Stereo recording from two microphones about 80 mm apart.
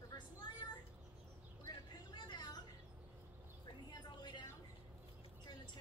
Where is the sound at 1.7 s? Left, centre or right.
Left.